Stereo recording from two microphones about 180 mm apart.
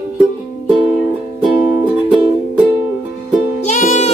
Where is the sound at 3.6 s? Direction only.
40° left (ahead or behind).